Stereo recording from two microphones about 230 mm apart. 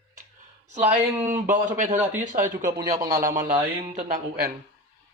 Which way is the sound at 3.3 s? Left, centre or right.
Right.